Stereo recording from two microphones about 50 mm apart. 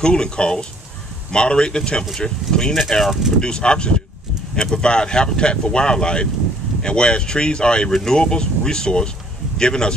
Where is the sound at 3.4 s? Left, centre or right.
Centre.